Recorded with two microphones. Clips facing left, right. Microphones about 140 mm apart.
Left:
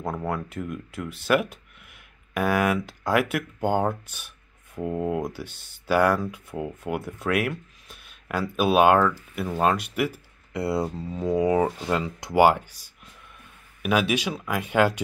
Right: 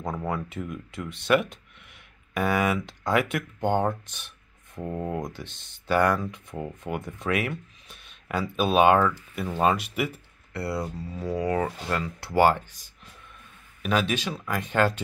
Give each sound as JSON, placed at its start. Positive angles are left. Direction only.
{"t": 0.0, "sound": "speech", "side_deg": 5}
{"t": 10.5, "sound": "speech", "side_deg": 20}